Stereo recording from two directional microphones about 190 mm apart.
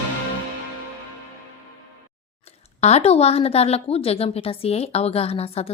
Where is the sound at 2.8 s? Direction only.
35° left (ahead or behind).